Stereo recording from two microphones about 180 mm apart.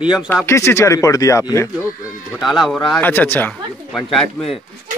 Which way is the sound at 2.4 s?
Centre (ahead or behind).